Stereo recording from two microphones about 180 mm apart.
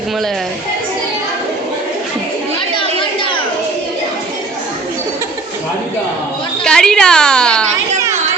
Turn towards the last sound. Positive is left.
turn(degrees=5)  # may be behind; listen again after turning